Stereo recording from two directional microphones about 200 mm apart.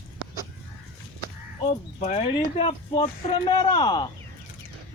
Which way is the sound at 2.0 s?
30° left (ahead or behind).